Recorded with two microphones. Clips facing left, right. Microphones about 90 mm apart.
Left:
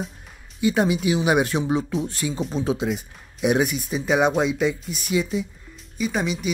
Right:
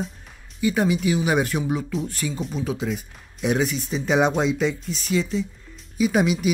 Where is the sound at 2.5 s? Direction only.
35° left (ahead or behind).